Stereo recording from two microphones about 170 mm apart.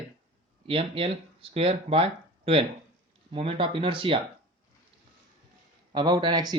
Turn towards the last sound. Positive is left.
turn(degrees=-25)  # may be behind; listen again after turning